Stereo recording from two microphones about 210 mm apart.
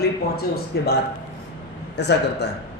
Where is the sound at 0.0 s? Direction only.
50° left (ahead or behind).